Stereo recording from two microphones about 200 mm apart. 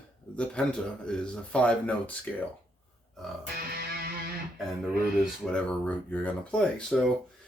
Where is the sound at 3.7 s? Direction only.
50° right (ahead or behind).